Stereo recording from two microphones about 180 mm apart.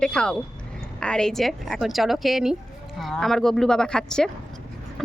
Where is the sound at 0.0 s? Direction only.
5° left (ahead or behind).